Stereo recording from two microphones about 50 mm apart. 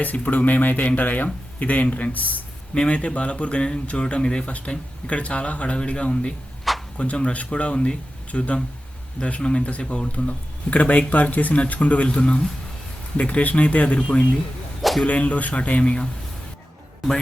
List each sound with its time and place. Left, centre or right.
0.0 s speech: left
2.7 s speech: left
14.8 s arrow: centre
15.0 s speech: left